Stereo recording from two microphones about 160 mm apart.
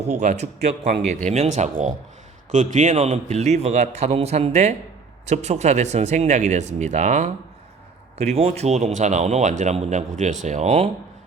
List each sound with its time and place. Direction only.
0.0 s speech: 45° right (ahead or behind)